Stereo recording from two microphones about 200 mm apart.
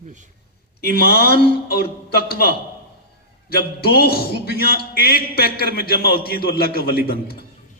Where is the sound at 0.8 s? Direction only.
50° left (ahead or behind).